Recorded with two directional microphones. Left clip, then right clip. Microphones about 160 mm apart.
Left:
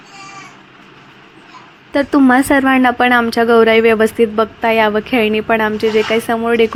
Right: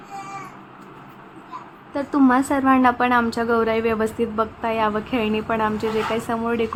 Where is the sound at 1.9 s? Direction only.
40° left (ahead or behind).